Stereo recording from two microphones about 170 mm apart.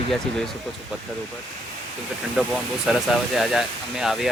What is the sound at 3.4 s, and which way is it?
Speech, centre (ahead or behind).